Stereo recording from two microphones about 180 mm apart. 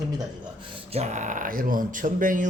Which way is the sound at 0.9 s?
40° right (ahead or behind).